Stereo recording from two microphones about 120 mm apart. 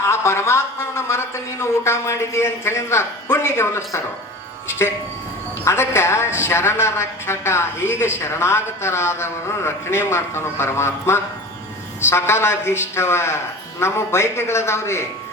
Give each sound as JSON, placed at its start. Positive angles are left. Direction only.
{"t": 0.0, "sound": "a sound", "side_deg": 20}
{"t": 1.6, "sound": "a woman's voice", "side_deg": 25}
{"t": 5.6, "sound": "a woman's voice", "side_deg": 20}